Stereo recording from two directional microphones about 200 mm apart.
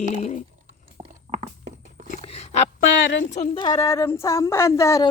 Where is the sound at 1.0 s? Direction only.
25° right (ahead or behind).